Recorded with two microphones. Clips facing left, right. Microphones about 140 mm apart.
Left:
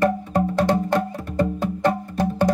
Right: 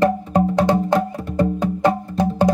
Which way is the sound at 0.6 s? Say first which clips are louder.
Right 1 dB; 15° right (ahead or behind).